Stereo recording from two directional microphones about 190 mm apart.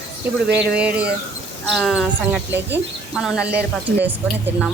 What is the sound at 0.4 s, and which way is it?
Speech, 60° right (ahead or behind).